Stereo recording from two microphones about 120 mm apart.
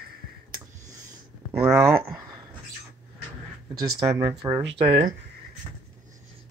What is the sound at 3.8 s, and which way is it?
Speech, 30° right (ahead or behind).